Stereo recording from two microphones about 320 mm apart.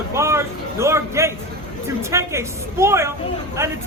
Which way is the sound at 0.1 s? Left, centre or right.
Centre.